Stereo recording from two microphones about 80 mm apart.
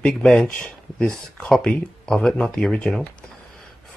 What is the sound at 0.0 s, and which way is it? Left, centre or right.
Speech, centre.